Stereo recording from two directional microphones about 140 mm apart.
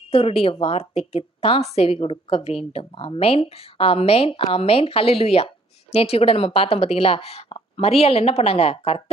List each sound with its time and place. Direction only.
0.1 s a woman's voice: 45° left (ahead or behind)